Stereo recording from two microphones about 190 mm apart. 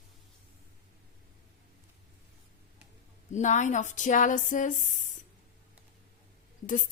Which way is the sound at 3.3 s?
40° left (ahead or behind).